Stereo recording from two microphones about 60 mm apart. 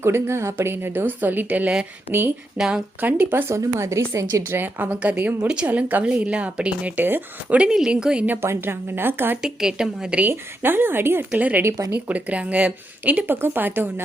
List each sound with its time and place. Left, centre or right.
0.0 s a woman's voice: right
2.6 s a woman's voice: centre
3.0 s a woman's voice: right
3.5 s a woman's voice: right
4.4 s a woman's voice: right
7.5 s a woman's voice: centre
8.4 s a woman's voice: right
9.4 s a woman's voice: centre
10.2 s a woman's voice: right
11.3 s speech: right